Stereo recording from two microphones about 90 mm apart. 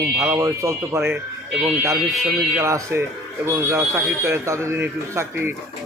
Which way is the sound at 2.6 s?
30° right (ahead or behind).